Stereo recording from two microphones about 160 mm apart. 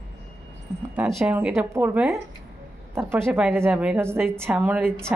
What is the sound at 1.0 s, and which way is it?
A woman's voice, 5° right (ahead or behind).